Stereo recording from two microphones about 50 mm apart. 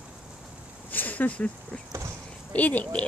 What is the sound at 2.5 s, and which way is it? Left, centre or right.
Speech, left.